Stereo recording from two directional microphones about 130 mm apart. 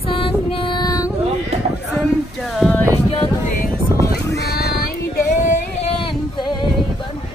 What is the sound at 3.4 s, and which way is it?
Music, 90° left.